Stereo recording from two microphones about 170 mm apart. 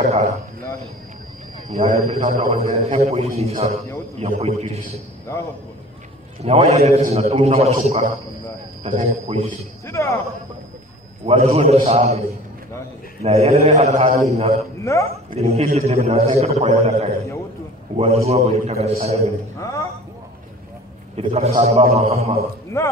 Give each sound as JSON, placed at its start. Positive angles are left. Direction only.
{"t": 1.7, "sound": "a man's voice", "side_deg": -40}
{"t": 6.4, "sound": "a man's voice", "side_deg": -40}
{"t": 9.8, "sound": "speech", "side_deg": 15}
{"t": 11.2, "sound": "a man's voice", "side_deg": -35}
{"t": 13.2, "sound": "a man's voice", "side_deg": -35}
{"t": 14.8, "sound": "speech", "side_deg": 15}
{"t": 15.0, "sound": "a man's voice", "side_deg": -35}
{"t": 19.6, "sound": "speech", "side_deg": 20}
{"t": 21.2, "sound": "a man's voice", "side_deg": -40}
{"t": 22.8, "sound": "speech", "side_deg": 15}